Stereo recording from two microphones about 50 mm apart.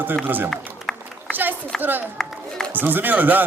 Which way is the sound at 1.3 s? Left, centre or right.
Right.